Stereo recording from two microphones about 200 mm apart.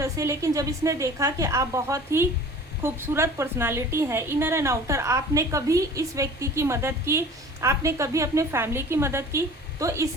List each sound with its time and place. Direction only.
0.0 s a woman's voice: 15° right (ahead or behind)